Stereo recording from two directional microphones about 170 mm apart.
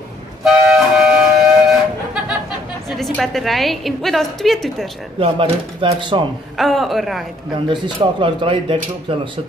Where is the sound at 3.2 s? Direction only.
Centre (ahead or behind).